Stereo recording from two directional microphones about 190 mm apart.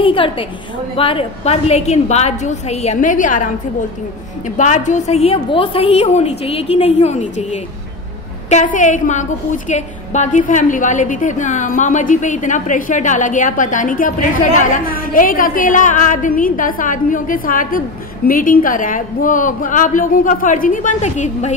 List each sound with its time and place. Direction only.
0.0 s a woman's voice: 25° left (ahead or behind); by 3.4 s 45° left (ahead or behind)
4.6 s a woman's voice: 40° left (ahead or behind)